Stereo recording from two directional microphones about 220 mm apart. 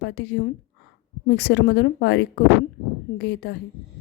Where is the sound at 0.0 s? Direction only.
50° left (ahead or behind).